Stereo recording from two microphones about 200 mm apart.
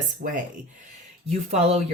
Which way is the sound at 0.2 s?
45° right (ahead or behind).